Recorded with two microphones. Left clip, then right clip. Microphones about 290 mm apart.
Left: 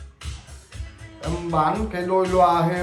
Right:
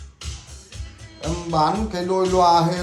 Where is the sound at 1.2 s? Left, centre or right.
Centre.